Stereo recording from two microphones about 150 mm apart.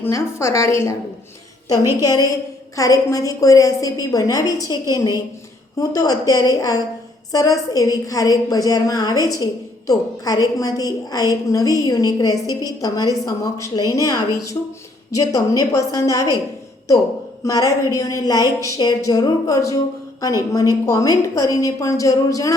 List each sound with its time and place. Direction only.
0.0 s a woman's voice: 20° left (ahead or behind)
2.0 s a woman's voice: 25° left (ahead or behind)
17.4 s a woman's voice: 20° left (ahead or behind)